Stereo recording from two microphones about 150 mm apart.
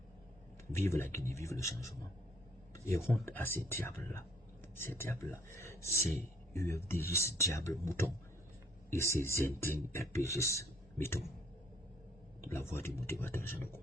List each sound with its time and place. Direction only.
0.7 s speech: 15° left (ahead or behind)
2.7 s speech: 20° left (ahead or behind)
9.1 s speech: 15° left (ahead or behind)
12.4 s speech: 15° left (ahead or behind)